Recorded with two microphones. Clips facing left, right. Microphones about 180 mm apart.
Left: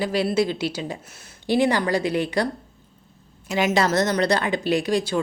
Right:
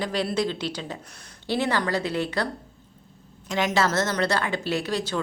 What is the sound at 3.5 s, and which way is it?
A woman's voice, 10° left (ahead or behind).